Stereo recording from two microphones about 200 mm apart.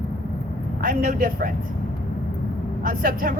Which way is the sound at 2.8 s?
45° right (ahead or behind).